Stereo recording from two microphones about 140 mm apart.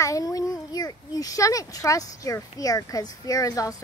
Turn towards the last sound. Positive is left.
turn(degrees=25)  # may be behind; listen again after turning